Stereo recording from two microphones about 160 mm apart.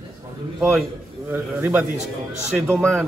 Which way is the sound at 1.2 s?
10° right (ahead or behind).